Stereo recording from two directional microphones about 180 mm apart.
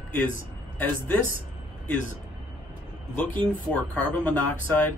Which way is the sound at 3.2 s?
10° left (ahead or behind).